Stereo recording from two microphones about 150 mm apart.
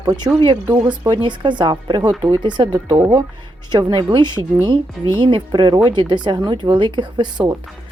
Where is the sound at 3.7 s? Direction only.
30° right (ahead or behind).